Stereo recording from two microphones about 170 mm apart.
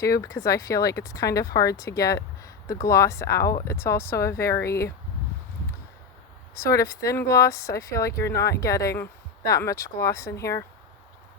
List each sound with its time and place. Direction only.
0.0 s speech: 20° left (ahead or behind)
6.5 s speech: 20° left (ahead or behind)